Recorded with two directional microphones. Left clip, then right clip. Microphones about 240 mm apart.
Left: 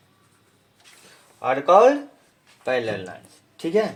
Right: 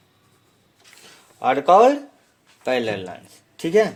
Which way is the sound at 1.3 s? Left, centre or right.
Right.